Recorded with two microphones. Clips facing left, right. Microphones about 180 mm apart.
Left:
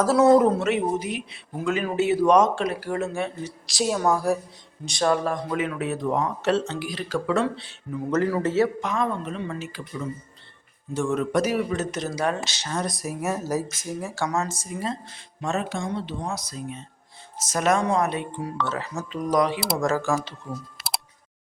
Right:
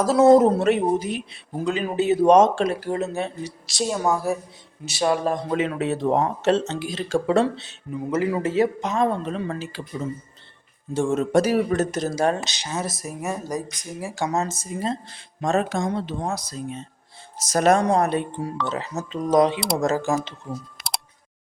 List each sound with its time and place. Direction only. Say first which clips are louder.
0.0 s speech: right 2 dB; 20° right (ahead or behind)
0.6 s a woman's voice: right 4 dB; 35° right (ahead or behind)
1.6 s speech: right 1 dB; 20° right (ahead or behind)
3.7 s speech: even; centre (ahead or behind); by 8.0 s 20° right (ahead or behind)
8.1 s speech: even; 10° right (ahead or behind)
9.0 s a woman's voice: right 4 dB; 35° right (ahead or behind)
11.7 s speech: right 5 dB; 45° right (ahead or behind)
12.5 s speech: even; 10° right (ahead or behind); by 13.7 s 5° left (ahead or behind)
13.7 s speech: left 1 dB; 15° right (ahead or behind)
15.4 s speech: right 5 dB; 40° right (ahead or behind)
16.5 s a woman's voice: right 3 dB; 30° right (ahead or behind)
18.6 s speech: even; 20° right (ahead or behind)
20.7 s a sound: even; centre (ahead or behind)